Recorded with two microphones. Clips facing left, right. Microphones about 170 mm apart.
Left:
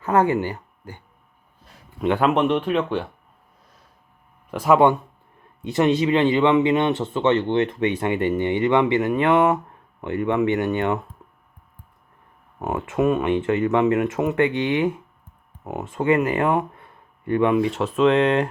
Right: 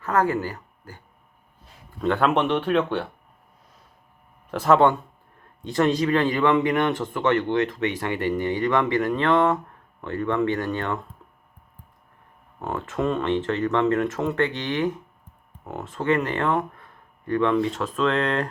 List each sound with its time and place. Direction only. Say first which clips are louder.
0.0 s speech: left 3 dB; 25° left (ahead or behind)
2.1 s speech: left 2 dB; 5° left (ahead or behind)
4.6 s speech: left 2 dB; 15° left (ahead or behind)
12.5 s speech: left 4 dB; 15° left (ahead or behind)